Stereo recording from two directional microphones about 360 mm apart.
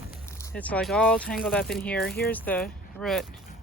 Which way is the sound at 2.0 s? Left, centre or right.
Left.